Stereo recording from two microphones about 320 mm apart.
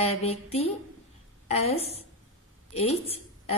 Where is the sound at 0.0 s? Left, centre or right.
Centre.